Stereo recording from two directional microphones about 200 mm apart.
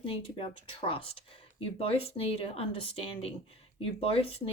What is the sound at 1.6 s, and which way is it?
Speech, 30° left (ahead or behind).